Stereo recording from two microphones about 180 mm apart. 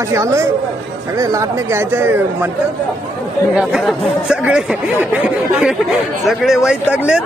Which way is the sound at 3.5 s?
5° right (ahead or behind).